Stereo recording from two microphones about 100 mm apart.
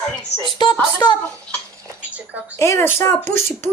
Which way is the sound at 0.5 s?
50° left (ahead or behind).